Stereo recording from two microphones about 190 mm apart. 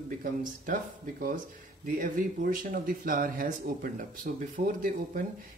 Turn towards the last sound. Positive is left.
turn(degrees=-45)  # may be behind; listen again after turning